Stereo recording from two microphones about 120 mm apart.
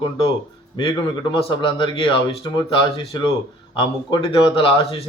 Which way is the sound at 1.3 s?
45° left (ahead or behind).